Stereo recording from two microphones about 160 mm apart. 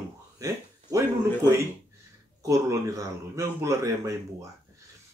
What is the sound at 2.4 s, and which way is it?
Speech, 20° right (ahead or behind).